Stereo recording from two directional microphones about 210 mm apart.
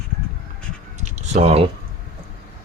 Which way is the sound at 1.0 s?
35° right (ahead or behind).